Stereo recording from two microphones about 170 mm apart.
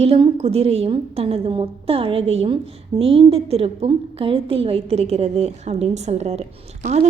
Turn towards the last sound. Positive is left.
turn(degrees=-40)  # may be behind; listen again after turning